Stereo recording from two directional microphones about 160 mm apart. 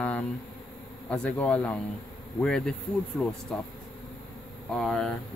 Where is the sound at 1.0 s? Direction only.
5° left (ahead or behind).